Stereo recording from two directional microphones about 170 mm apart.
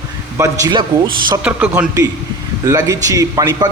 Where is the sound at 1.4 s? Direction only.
10° right (ahead or behind).